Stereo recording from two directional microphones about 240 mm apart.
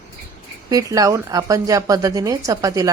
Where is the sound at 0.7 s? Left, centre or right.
Centre.